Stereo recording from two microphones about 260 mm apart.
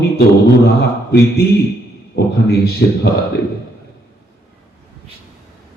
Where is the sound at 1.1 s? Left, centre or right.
Left.